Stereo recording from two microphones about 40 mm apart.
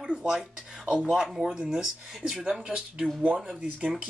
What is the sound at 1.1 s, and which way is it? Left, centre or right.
Speech, centre.